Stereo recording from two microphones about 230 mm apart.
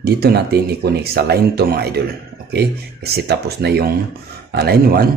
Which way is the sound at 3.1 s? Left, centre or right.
Right.